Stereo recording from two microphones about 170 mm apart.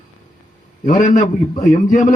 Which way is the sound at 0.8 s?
45° left (ahead or behind).